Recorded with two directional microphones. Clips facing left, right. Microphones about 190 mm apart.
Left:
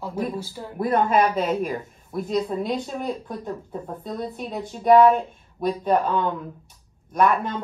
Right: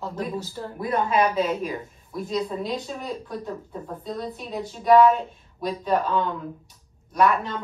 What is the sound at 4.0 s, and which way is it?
Speech, 50° left (ahead or behind).